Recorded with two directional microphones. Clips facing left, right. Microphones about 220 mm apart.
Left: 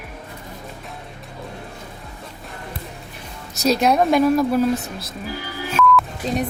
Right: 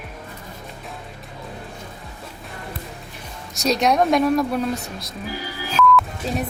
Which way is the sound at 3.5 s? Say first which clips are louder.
Left 2 dB; centre (ahead or behind).